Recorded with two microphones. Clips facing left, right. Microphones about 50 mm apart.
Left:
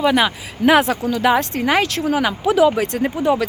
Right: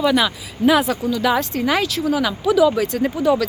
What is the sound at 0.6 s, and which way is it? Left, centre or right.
Speech, left.